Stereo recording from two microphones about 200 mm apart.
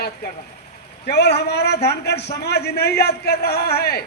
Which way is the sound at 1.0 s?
55° left (ahead or behind).